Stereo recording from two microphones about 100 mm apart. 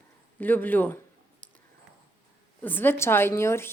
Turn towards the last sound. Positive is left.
turn(degrees=25)  # may be behind; listen again after turning